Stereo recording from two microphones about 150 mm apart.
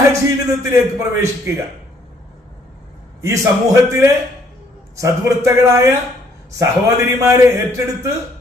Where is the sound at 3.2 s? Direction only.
20° right (ahead or behind).